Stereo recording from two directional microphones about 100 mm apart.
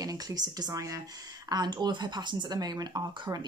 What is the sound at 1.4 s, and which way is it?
Speech, 45° right (ahead or behind).